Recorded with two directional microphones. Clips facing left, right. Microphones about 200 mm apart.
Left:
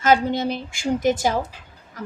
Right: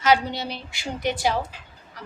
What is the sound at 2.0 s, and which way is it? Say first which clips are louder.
Music: left 8 dB; 45° left (ahead or behind).